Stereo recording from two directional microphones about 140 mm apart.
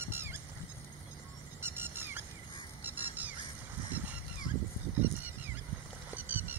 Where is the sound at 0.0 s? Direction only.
15° right (ahead or behind).